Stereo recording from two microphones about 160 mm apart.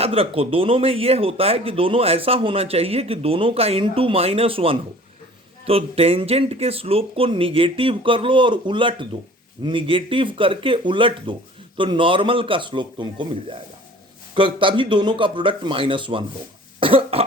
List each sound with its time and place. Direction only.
0.0 s speech: 35° right (ahead or behind)